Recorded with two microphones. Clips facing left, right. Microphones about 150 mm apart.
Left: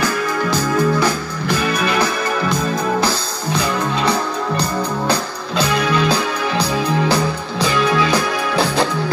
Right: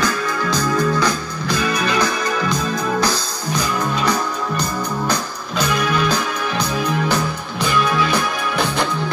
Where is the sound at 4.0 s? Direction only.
30° left (ahead or behind).